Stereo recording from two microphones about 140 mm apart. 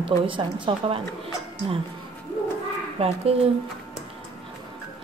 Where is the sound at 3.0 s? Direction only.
45° right (ahead or behind).